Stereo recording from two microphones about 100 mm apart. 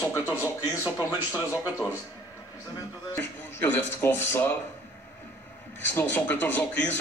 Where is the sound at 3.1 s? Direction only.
20° left (ahead or behind).